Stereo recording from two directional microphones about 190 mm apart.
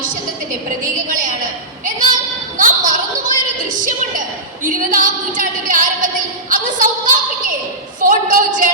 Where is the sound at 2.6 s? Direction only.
45° right (ahead or behind).